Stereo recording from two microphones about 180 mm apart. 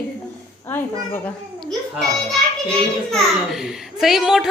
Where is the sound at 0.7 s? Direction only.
10° left (ahead or behind).